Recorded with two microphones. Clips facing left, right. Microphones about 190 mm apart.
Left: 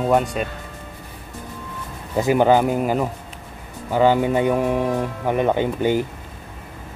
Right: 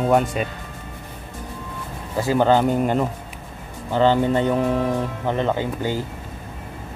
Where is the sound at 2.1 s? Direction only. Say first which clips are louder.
Left 2 dB; 15° left (ahead or behind).